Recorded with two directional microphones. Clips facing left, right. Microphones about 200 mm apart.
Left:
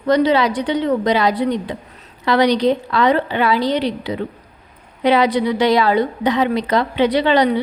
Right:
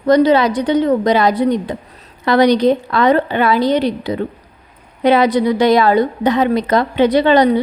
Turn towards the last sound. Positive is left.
turn(degrees=-45)  # may be behind; listen again after turning